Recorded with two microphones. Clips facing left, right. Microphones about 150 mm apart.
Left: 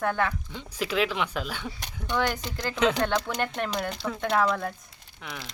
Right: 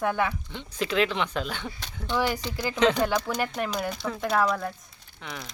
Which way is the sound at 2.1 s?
5° right (ahead or behind).